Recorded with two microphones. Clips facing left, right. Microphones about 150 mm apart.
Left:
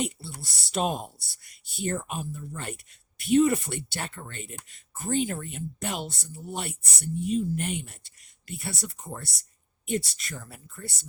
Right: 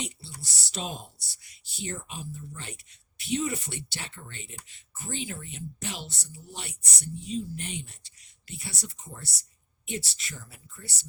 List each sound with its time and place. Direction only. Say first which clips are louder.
0.0 s speech: left 7 dB; 50° left (ahead or behind)